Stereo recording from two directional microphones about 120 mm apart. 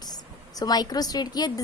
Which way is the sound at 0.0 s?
35° left (ahead or behind).